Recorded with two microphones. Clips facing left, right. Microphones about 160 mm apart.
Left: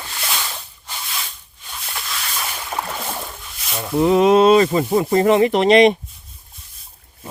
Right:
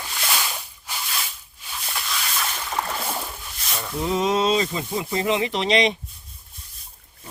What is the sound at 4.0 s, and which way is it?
Speech, 65° left (ahead or behind).